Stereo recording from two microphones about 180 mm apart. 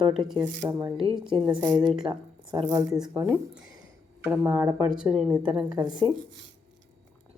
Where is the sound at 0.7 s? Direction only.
15° right (ahead or behind).